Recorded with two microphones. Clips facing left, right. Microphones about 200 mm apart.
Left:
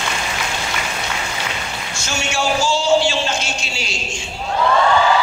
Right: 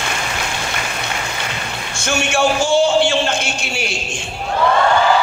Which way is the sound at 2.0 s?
55° right (ahead or behind).